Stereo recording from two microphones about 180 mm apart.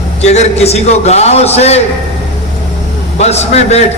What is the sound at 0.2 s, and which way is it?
A man's voice, 35° left (ahead or behind).